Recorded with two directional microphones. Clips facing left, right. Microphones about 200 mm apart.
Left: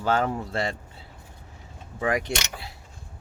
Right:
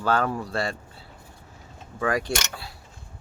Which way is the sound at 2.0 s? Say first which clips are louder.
Even; 20° left (ahead or behind).